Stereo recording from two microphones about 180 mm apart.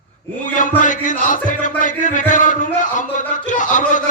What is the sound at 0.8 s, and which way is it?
A man's voice, 45° left (ahead or behind).